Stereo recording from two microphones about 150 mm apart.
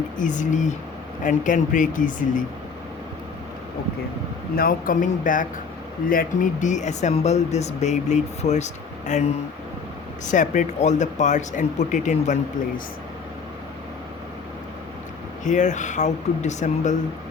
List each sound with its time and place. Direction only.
0.2 s speech: 55° left (ahead or behind)
4.5 s speech: 70° left (ahead or behind); by 9.2 s 50° left (ahead or behind)
10.2 s speech: 55° left (ahead or behind)
15.4 s speech: 55° left (ahead or behind)